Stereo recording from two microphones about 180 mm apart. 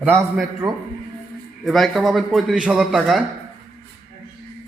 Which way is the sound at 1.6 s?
Centre (ahead or behind).